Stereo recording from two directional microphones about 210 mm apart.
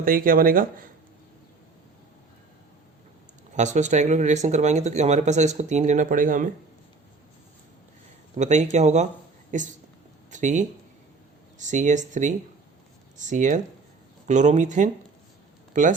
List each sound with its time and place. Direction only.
0.0 s speech: 40° right (ahead or behind)
3.5 s speech: 35° right (ahead or behind)
8.4 s speech: 35° right (ahead or behind)